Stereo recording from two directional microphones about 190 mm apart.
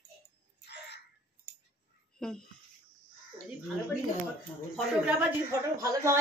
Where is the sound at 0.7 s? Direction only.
60° left (ahead or behind).